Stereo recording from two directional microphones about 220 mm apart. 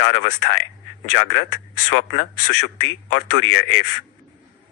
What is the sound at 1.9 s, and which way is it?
Speech, 60° left (ahead or behind).